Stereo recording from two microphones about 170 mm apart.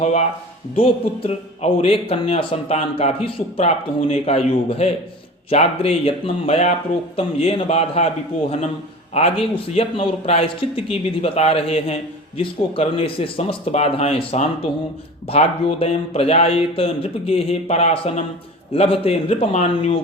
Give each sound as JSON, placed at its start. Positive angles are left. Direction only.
{"t": 0.0, "sound": "a man's voice", "side_deg": 40}